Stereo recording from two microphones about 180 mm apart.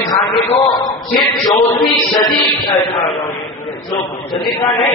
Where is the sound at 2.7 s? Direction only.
35° left (ahead or behind).